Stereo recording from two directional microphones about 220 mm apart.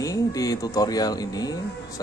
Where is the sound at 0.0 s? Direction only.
15° left (ahead or behind).